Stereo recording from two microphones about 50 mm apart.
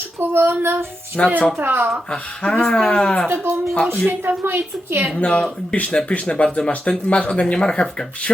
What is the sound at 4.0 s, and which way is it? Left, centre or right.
Speech, right.